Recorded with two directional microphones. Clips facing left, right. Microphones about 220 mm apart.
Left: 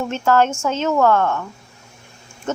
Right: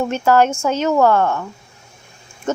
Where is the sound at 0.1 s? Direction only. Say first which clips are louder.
Even; 15° right (ahead or behind).